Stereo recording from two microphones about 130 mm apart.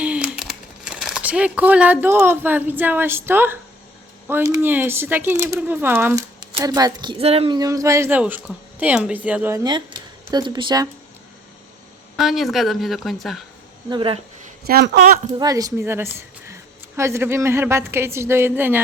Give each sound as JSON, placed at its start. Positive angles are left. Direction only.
{"t": 0.0, "sound": "speech", "side_deg": -10}
{"t": 6.6, "sound": "a woman's voice", "side_deg": -30}
{"t": 7.2, "sound": "speech", "side_deg": -50}
{"t": 7.5, "sound": "a woman's voice", "side_deg": -30}
{"t": 8.2, "sound": "speech", "side_deg": -10}
{"t": 9.6, "sound": "speech", "side_deg": -35}
{"t": 12.1, "sound": "speech", "side_deg": 0}
{"t": 13.9, "sound": "speech", "side_deg": -45}
{"t": 15.4, "sound": "a woman's voice", "side_deg": -30}
{"t": 17.0, "sound": "a woman's voice", "side_deg": -20}